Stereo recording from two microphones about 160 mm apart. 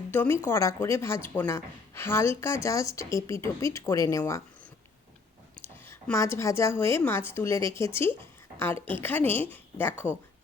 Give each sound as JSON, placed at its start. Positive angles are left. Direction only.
{"t": 0.1, "sound": "a woman's voice", "side_deg": 10}
{"t": 5.8, "sound": "a woman's voice", "side_deg": 15}